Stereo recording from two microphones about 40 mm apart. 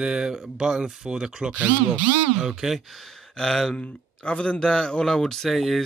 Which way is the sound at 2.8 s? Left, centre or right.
Centre.